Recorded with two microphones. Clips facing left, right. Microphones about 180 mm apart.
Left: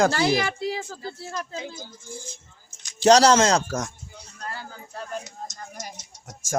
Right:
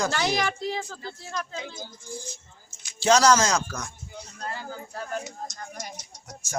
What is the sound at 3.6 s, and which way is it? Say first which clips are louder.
Speech: left 7 dB; 45° left (ahead or behind).